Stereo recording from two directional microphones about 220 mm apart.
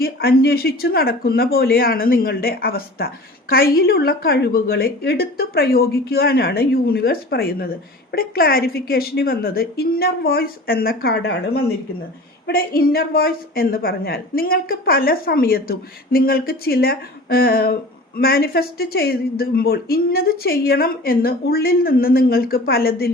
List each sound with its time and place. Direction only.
0.0 s a woman's voice: 45° left (ahead or behind)